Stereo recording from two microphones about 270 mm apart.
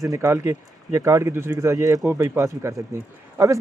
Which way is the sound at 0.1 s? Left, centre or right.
Centre.